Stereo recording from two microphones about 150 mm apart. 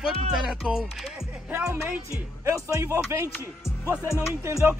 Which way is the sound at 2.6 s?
20° right (ahead or behind).